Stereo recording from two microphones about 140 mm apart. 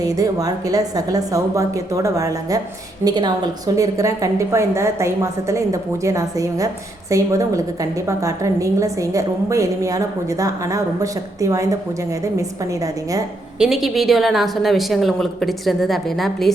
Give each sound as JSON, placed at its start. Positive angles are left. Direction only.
{"t": 0.0, "sound": "a woman's voice", "side_deg": -25}
{"t": 13.6, "sound": "a woman's voice", "side_deg": 0}